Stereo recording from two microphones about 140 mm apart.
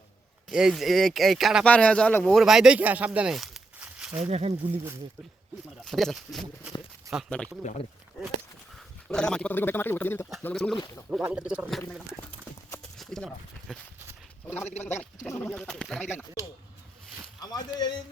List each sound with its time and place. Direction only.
0.5 s speech: centre (ahead or behind)
4.2 s speech: 45° right (ahead or behind)
5.8 s speech: centre (ahead or behind)
7.1 s speech: 25° right (ahead or behind)
7.6 s speech: 60° left (ahead or behind)
9.0 s speech: 5° left (ahead or behind)
11.1 s speech: 10° right (ahead or behind)
13.0 s speech: 5° left (ahead or behind)
17.4 s speech: 30° left (ahead or behind)